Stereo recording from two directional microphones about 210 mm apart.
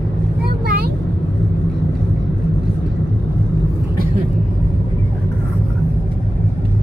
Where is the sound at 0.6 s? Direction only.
45° right (ahead or behind).